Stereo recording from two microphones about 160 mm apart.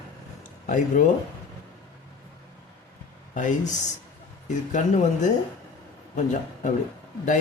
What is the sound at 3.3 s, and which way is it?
Speech, 50° left (ahead or behind).